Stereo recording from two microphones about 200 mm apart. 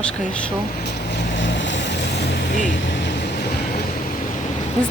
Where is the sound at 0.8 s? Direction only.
60° left (ahead or behind).